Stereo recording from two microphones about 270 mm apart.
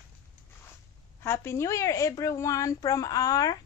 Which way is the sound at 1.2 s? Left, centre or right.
Centre.